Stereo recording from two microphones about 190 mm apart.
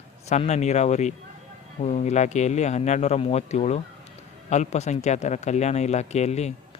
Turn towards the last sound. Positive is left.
turn(degrees=35)  # may be behind; listen again after turning